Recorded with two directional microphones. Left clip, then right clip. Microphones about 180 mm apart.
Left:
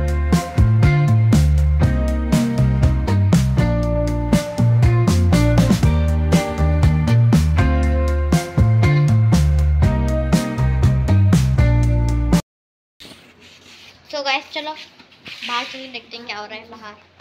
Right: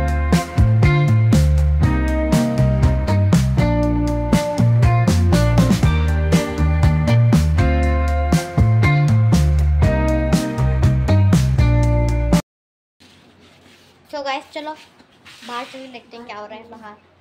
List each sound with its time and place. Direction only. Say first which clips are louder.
0.0 s music: right 2 dB; centre (ahead or behind)
14.1 s a sound: left 3 dB; 15° right (ahead or behind)
15.5 s a woman's voice: left 4 dB; 15° right (ahead or behind)